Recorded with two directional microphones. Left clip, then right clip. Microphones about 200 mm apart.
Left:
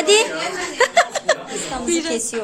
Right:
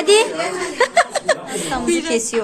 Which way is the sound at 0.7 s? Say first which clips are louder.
Even; 5° left (ahead or behind).